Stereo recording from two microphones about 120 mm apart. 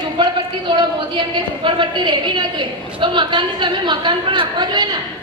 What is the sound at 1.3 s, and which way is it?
A woman's voice, 40° right (ahead or behind).